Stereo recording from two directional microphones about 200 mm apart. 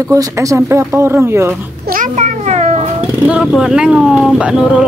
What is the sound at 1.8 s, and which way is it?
Cat, 40° right (ahead or behind).